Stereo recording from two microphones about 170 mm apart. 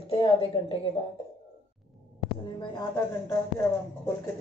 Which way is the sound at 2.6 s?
20° left (ahead or behind).